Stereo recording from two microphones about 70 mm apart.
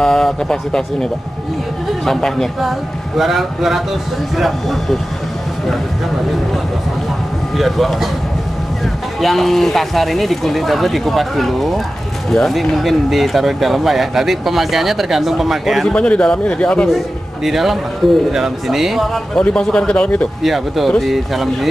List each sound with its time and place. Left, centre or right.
0.0 s speech: centre
2.0 s speech: centre
7.5 s speech: centre
9.2 s speech: centre
15.9 s speech: centre
17.5 s speech: centre
19.3 s speech: centre
20.4 s speech: centre